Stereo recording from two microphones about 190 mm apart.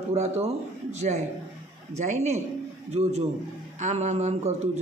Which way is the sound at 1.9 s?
40° right (ahead or behind).